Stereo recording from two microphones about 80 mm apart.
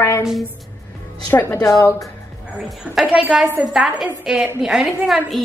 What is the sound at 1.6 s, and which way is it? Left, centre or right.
Speech, left.